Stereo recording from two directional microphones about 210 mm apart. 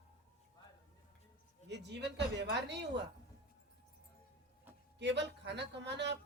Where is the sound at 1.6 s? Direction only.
55° right (ahead or behind).